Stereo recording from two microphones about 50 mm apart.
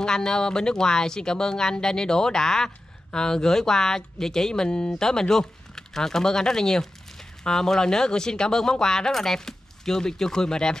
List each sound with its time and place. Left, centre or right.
0.0 s speech: centre